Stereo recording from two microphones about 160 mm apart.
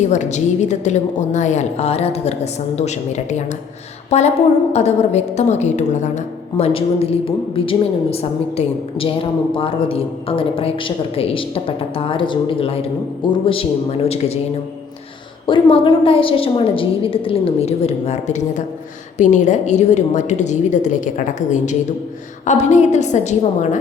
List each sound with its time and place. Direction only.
0.0 s a woman's voice: 45° left (ahead or behind)
15.4 s a woman's voice: 30° left (ahead or behind); by 23.7 s 45° left (ahead or behind)